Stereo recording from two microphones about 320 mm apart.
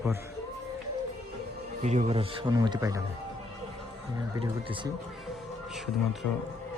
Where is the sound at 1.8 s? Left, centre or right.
Right.